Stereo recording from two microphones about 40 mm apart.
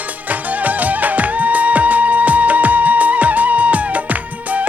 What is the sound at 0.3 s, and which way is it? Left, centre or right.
Music, right.